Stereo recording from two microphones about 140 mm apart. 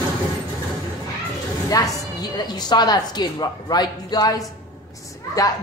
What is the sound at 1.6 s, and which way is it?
A woman's voice, 25° left (ahead or behind).